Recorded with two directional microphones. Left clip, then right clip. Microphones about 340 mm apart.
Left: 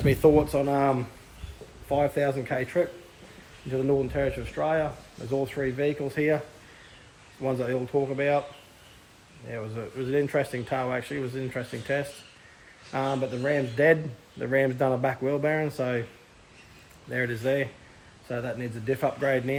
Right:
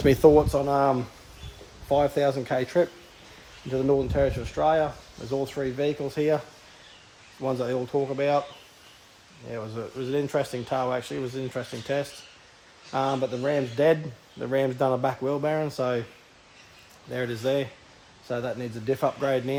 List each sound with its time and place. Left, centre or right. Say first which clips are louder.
0.0 s a man's voice: right 3 dB; right
7.4 s a man's voice: right 1 dB; centre
9.5 s a man's voice: right 1 dB; centre
17.1 s a man's voice: even; centre